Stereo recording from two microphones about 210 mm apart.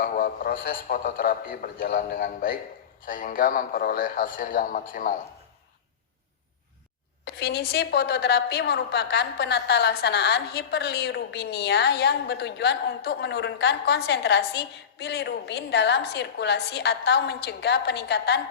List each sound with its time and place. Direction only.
0.0 s a woman's voice: 40° left (ahead or behind)
7.3 s a woman's voice: 50° left (ahead or behind)